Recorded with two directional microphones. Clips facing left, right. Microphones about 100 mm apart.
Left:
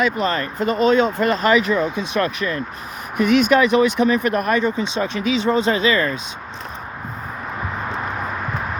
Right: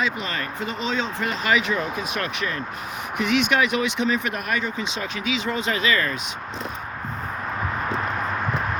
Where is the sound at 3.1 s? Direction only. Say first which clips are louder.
Left 6 dB; 45° left (ahead or behind); by 6.2 s 30° left (ahead or behind).